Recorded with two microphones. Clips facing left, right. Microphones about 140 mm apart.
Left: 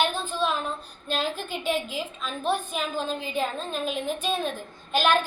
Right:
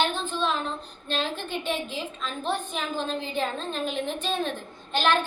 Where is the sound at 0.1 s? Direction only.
10° left (ahead or behind).